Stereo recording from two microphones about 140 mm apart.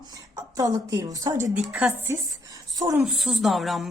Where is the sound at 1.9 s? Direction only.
20° right (ahead or behind).